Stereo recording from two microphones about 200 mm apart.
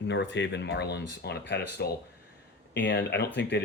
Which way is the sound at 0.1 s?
60° left (ahead or behind).